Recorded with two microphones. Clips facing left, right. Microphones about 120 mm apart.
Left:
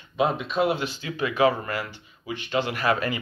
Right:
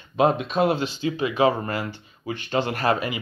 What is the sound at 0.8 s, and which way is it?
Speech, 25° right (ahead or behind).